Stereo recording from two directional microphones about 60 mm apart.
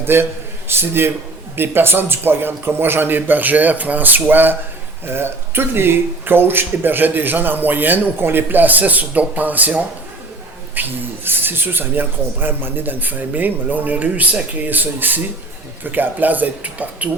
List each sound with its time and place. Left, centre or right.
0.0 s a man's voice: right